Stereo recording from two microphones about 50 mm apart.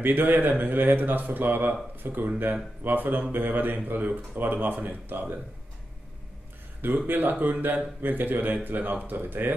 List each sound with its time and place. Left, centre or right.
0.0 s speech: right
7.1 s speech: right